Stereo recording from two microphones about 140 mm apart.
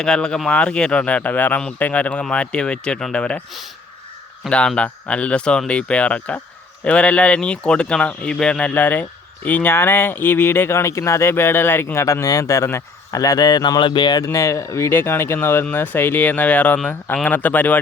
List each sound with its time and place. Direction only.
0.0 s speech: 5° left (ahead or behind); by 14.3 s 30° left (ahead or behind)
14.3 s speech: 20° left (ahead or behind)